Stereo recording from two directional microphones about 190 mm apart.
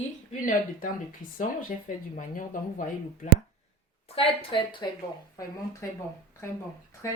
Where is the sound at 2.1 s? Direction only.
45° left (ahead or behind).